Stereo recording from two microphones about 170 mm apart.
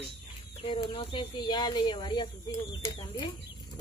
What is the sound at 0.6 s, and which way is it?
Speech, 30° left (ahead or behind).